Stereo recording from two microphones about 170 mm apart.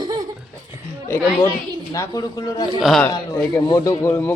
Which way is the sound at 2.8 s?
Centre (ahead or behind).